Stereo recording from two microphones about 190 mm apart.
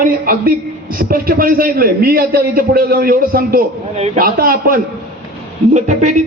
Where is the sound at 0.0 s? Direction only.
50° right (ahead or behind).